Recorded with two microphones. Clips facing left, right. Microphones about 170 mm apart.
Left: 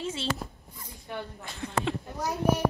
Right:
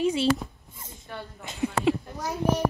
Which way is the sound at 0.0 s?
15° right (ahead or behind).